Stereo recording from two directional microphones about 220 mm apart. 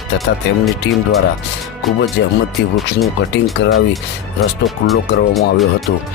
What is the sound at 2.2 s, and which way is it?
Speech, 55° left (ahead or behind).